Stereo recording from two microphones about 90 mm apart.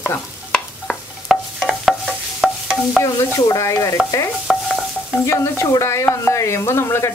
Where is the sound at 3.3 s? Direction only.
35° left (ahead or behind).